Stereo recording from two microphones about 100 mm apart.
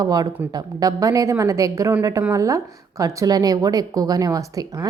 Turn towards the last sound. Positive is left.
turn(degrees=-35)  # may be behind; listen again after turning